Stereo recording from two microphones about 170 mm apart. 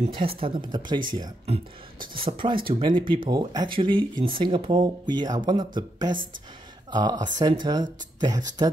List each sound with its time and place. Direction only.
0.0 s speech: 30° right (ahead or behind)
2.1 s speech: 30° right (ahead or behind)